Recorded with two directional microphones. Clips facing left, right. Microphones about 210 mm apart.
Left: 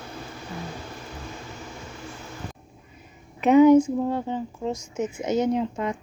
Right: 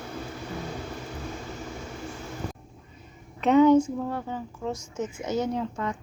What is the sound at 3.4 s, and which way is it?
Speech, 10° left (ahead or behind).